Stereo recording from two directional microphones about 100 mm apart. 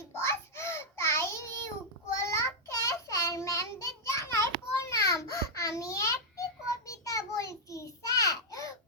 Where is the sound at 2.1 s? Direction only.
30° left (ahead or behind).